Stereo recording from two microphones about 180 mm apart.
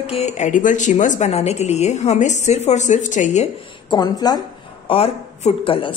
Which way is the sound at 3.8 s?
25° left (ahead or behind).